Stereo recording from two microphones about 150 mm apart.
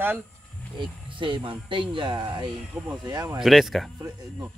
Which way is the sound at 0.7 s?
35° right (ahead or behind).